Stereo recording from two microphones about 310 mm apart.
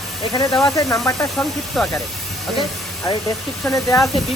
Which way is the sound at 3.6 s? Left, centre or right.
Centre.